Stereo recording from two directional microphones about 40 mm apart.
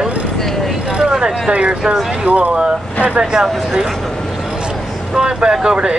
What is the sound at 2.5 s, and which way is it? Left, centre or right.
Speech, right.